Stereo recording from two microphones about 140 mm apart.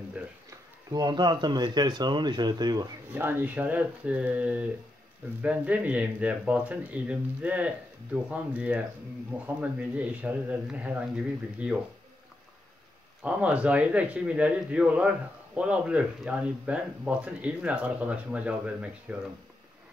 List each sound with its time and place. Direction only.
0.5 s speech: 30° right (ahead or behind)
3.2 s speech: 15° right (ahead or behind)
13.2 s speech: 10° right (ahead or behind)